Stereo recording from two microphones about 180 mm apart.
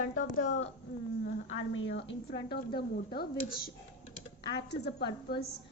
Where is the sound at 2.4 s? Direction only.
60° left (ahead or behind).